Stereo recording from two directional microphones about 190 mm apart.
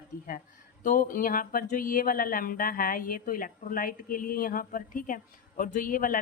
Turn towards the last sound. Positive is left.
turn(degrees=45)  # may be behind; listen again after turning